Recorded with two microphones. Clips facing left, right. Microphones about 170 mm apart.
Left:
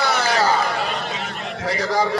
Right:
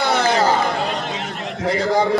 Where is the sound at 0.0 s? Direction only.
25° right (ahead or behind).